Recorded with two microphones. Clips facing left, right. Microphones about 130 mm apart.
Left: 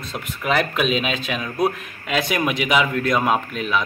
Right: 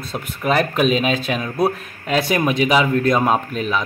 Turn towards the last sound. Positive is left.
turn(degrees=-35)  # may be behind; listen again after turning